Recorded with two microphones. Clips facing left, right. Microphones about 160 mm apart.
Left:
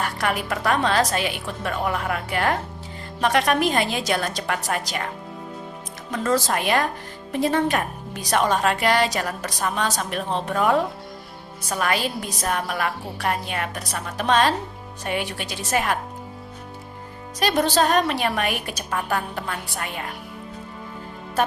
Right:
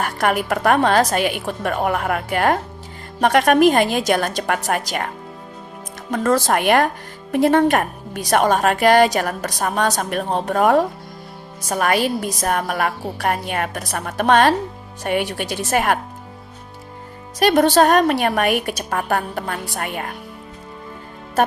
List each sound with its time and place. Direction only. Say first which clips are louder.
0.0 s a woman's voice: right 5 dB; 50° right (ahead or behind)
17.4 s a woman's voice: right 6 dB; 55° right (ahead or behind)